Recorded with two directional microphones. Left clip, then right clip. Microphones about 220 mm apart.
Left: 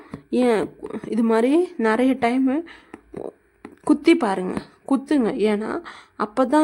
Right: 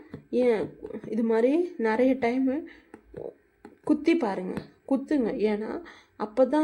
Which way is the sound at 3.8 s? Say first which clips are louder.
Left 7 dB; 35° left (ahead or behind).